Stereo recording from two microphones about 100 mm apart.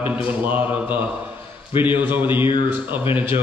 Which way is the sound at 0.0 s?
20° right (ahead or behind).